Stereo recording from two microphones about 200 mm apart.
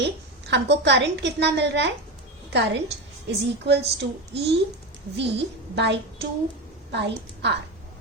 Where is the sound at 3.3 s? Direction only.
55° right (ahead or behind).